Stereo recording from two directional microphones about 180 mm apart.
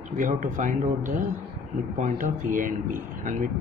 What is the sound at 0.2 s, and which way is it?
Speech, 45° right (ahead or behind).